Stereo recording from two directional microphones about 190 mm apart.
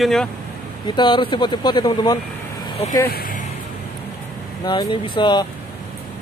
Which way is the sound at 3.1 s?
50° left (ahead or behind).